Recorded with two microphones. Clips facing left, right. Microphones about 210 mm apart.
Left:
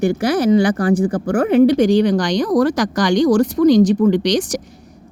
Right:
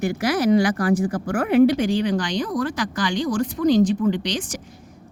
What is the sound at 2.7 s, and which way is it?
Speech, 75° left (ahead or behind).